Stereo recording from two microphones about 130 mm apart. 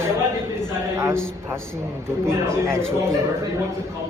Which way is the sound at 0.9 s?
20° right (ahead or behind).